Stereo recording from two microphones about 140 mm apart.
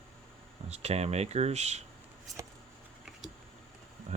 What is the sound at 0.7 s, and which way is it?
Speech, 50° right (ahead or behind).